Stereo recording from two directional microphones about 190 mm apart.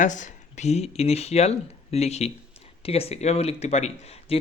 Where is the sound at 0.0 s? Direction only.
40° left (ahead or behind).